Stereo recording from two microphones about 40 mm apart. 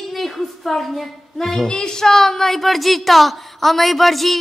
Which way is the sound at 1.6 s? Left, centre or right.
Left.